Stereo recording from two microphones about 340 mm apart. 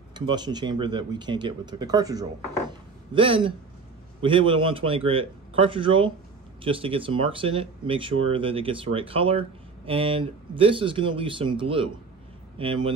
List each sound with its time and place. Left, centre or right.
0.1 s speech: centre